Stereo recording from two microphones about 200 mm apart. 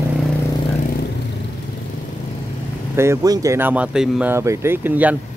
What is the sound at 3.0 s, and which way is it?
Speech, 15° right (ahead or behind).